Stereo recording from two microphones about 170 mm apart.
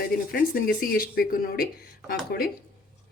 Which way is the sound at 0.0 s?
60° left (ahead or behind).